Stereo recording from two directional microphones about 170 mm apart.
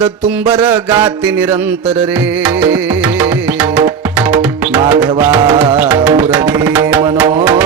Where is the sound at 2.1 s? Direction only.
10° right (ahead or behind).